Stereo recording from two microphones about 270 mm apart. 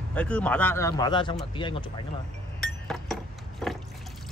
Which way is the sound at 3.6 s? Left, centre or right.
Centre.